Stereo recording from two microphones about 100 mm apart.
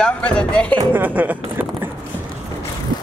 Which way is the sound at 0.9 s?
20° right (ahead or behind).